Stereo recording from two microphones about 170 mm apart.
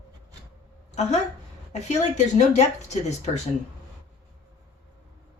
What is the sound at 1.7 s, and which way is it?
Speech, 40° left (ahead or behind).